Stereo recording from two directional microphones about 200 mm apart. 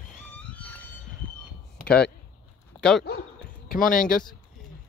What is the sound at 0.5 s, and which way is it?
Music, 10° left (ahead or behind).